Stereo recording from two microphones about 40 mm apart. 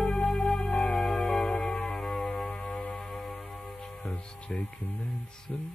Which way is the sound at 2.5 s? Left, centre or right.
Left.